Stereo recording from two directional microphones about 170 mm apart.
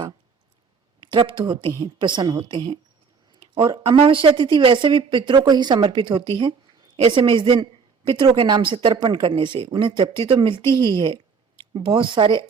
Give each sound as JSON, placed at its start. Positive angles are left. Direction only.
{"t": 1.0, "sound": "a woman's voice", "side_deg": -30}